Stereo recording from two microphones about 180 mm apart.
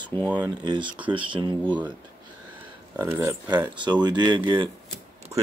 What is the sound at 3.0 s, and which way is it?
Speech, 15° right (ahead or behind).